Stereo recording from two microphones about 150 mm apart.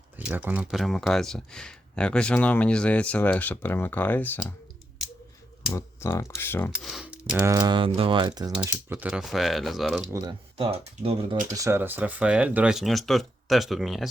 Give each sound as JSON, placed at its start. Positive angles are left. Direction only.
{"t": 0.2, "sound": "speech", "side_deg": -10}
{"t": 5.7, "sound": "speech", "side_deg": 20}
{"t": 6.7, "sound": "speech", "side_deg": 0}
{"t": 7.4, "sound": "speech", "side_deg": -25}
{"t": 8.6, "sound": "speech", "side_deg": -10}
{"t": 10.1, "sound": "speech", "side_deg": -25}
{"t": 10.6, "sound": "speech", "side_deg": -40}
{"t": 11.5, "sound": "speech", "side_deg": -20}